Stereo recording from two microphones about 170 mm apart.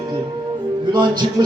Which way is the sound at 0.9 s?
25° right (ahead or behind).